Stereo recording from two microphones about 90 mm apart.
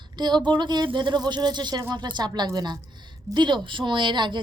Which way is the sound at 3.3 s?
60° right (ahead or behind).